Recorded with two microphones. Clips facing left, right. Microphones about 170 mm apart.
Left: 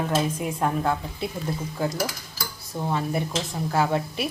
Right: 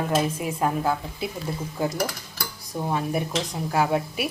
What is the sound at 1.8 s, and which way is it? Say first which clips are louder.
Speech: right 2 dB; 15° right (ahead or behind).